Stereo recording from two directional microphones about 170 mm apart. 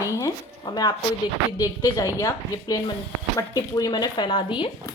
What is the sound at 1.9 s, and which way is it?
Speech, 20° left (ahead or behind).